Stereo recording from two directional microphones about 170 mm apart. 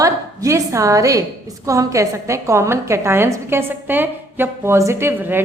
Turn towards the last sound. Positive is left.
turn(degrees=-10)  # may be behind; listen again after turning